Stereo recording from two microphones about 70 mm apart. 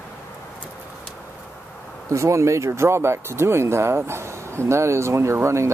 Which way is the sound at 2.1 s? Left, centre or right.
Right.